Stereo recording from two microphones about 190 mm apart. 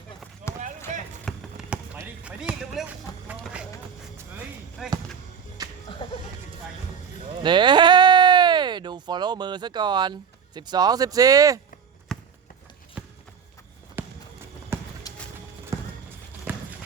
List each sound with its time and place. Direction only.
0.4 s run: 40° right (ahead or behind)
1.2 s basketball bounce: 5° right (ahead or behind)
3.4 s vehicle: 5° right (ahead or behind)
4.8 s basketball bounce: centre (ahead or behind)
5.6 s music: 20° right (ahead or behind)
6.0 s a sound: 25° left (ahead or behind)
7.4 s a sound: 25° right (ahead or behind)
12.1 s a sound: centre (ahead or behind)
13.0 s clip-clop: 5° right (ahead or behind)
14.0 s fireworks: 10° right (ahead or behind)
14.7 s clip-clop: 15° right (ahead or behind)
16.5 s run: 10° right (ahead or behind)